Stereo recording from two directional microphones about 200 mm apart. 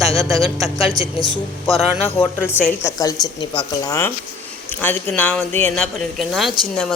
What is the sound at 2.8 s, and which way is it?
Speech, 20° left (ahead or behind).